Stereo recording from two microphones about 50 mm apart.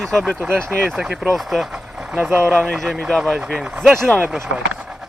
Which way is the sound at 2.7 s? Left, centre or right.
Centre.